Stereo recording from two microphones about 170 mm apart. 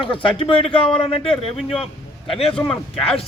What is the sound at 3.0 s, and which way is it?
Speech, 35° left (ahead or behind).